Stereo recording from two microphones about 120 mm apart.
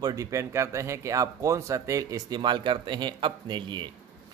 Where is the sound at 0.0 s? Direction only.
30° right (ahead or behind).